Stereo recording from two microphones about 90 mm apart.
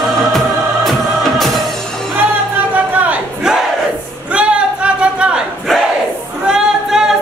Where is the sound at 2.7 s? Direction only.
20° right (ahead or behind).